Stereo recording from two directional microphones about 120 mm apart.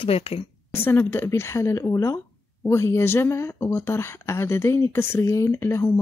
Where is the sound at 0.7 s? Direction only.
20° left (ahead or behind).